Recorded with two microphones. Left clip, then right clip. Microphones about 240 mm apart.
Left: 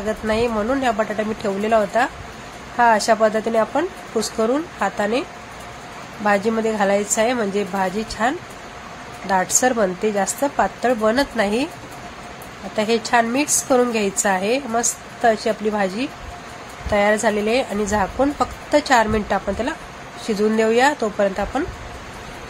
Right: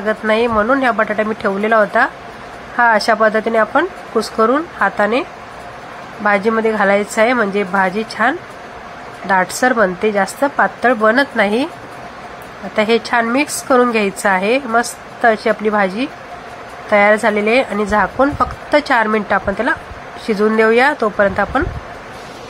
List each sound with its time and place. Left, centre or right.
0.3 s a woman's voice: centre
6.2 s a woman's voice: centre
12.7 s a woman's voice: centre